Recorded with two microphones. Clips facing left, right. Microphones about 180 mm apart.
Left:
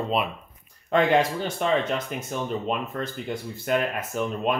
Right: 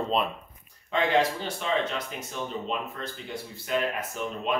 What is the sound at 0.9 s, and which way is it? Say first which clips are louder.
Speech: left 4 dB; 50° left (ahead or behind).